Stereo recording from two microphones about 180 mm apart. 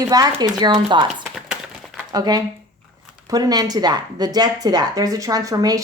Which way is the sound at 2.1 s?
20° right (ahead or behind).